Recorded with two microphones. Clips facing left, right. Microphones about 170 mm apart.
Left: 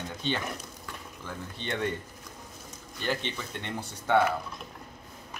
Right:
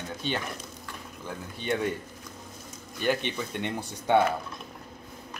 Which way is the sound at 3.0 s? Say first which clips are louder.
Right 4 dB; 15° right (ahead or behind).